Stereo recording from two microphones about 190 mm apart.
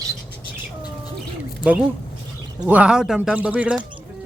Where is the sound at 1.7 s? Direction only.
5° right (ahead or behind).